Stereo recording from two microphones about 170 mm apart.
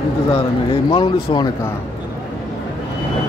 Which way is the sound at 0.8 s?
30° left (ahead or behind).